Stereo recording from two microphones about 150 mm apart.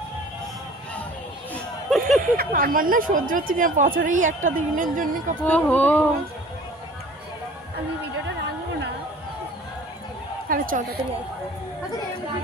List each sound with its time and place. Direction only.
1.5 s a sound: centre (ahead or behind)
2.3 s a woman's voice: 70° right (ahead or behind)
5.5 s speech: 10° left (ahead or behind)
10.5 s a woman's voice: 70° right (ahead or behind)